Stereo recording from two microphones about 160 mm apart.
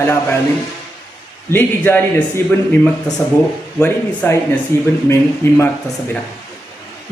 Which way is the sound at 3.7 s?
5° left (ahead or behind).